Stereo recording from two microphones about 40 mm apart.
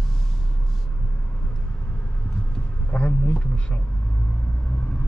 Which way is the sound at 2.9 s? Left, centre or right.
Left.